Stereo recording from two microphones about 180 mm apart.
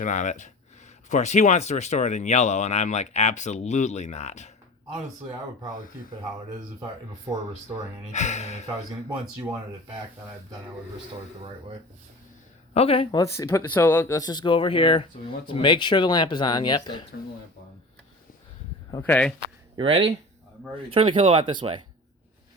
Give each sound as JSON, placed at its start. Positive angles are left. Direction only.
{"t": 0.0, "sound": "speech", "side_deg": 45}
{"t": 7.3, "sound": "speech", "side_deg": -20}
{"t": 8.1, "sound": "speech", "side_deg": 40}
{"t": 12.7, "sound": "speech", "side_deg": 35}
{"t": 19.0, "sound": "speech", "side_deg": 10}
{"t": 19.4, "sound": "speech", "side_deg": -30}